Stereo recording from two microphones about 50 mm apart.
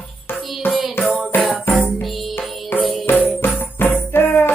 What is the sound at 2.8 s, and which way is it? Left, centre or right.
Music, centre.